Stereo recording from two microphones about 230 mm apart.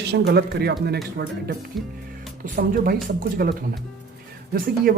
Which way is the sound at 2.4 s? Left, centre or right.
Right.